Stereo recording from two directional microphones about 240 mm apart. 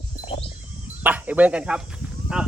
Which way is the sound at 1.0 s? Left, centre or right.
Centre.